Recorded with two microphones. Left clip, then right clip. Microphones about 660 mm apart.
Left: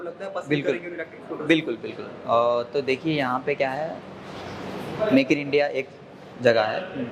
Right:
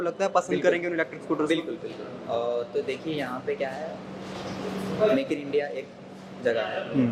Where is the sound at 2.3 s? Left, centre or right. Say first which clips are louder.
Left 7 dB; left.